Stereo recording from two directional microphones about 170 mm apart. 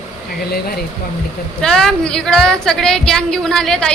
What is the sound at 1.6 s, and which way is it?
A man's voice, 5° left (ahead or behind).